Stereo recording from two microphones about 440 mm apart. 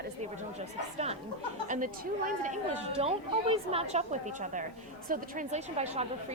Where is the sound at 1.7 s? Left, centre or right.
Centre.